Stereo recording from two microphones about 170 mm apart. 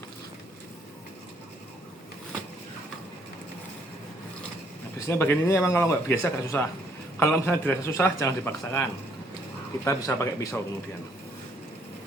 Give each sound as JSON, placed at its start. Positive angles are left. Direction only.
{"t": 4.9, "sound": "speech", "side_deg": 15}